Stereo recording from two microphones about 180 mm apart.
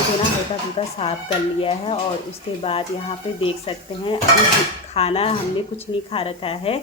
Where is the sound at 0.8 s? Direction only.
35° left (ahead or behind).